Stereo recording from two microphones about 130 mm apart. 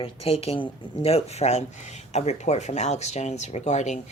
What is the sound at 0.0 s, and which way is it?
Speech, 50° left (ahead or behind).